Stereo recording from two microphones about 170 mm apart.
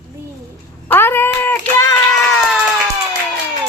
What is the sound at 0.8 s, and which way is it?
Speech, 10° left (ahead or behind).